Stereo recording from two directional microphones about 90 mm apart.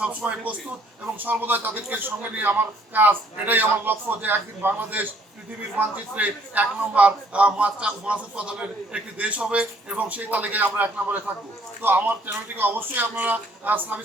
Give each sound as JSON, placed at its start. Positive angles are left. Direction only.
{"t": 0.0, "sound": "a man's voice", "side_deg": -15}